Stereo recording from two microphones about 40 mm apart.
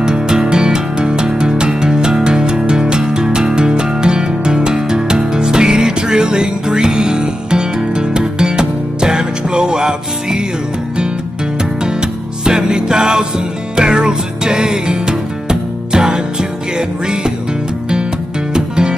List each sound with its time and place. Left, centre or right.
0.0 s music: centre
11.8 s music: centre
18.5 s music: centre